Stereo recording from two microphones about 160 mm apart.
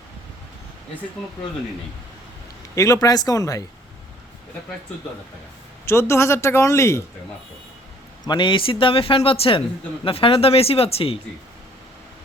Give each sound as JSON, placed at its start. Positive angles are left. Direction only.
{"t": 2.7, "sound": "speech", "side_deg": 20}
{"t": 5.8, "sound": "speech", "side_deg": 15}
{"t": 8.3, "sound": "speech", "side_deg": 30}